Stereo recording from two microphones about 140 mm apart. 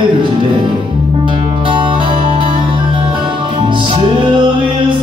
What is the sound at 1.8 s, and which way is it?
Music, 35° right (ahead or behind).